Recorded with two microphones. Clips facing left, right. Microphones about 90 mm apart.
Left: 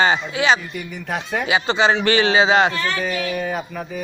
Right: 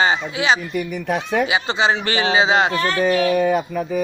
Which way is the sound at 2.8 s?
45° right (ahead or behind).